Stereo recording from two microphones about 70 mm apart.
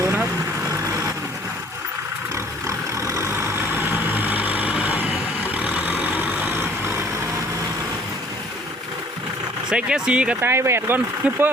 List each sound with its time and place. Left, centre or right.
2.6 s vehicle: right
3.3 s vehicle: right
9.6 s speech: centre
10.4 s speech: right